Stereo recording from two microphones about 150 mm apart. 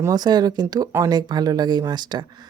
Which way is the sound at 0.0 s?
25° right (ahead or behind).